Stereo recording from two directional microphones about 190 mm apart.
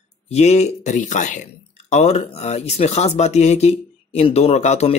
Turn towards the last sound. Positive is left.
turn(degrees=35)  # may be behind; listen again after turning